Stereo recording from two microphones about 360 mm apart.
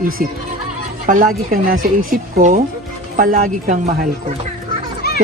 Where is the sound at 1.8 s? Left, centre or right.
Right.